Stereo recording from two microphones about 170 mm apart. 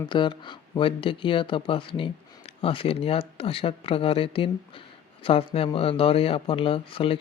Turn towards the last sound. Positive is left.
turn(degrees=30)  # may be behind; listen again after turning